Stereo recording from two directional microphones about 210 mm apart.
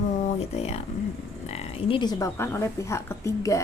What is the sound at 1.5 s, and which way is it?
Speech, 30° left (ahead or behind).